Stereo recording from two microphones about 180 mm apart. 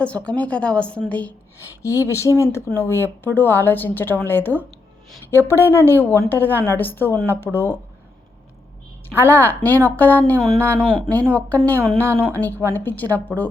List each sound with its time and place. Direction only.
0.3 s a woman's voice: 5° left (ahead or behind)
9.0 s a woman's voice: 10° left (ahead or behind)